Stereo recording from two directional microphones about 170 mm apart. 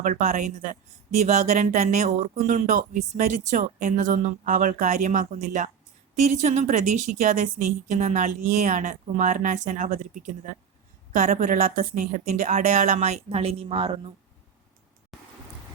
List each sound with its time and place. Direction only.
0.0 s speech: 50° right (ahead or behind)
11.1 s speech: 55° right (ahead or behind); by 14.1 s 30° right (ahead or behind)
15.1 s rain: centre (ahead or behind)